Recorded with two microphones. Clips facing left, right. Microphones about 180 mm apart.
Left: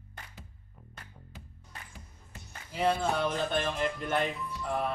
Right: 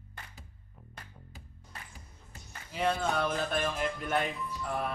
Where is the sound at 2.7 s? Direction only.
5° left (ahead or behind).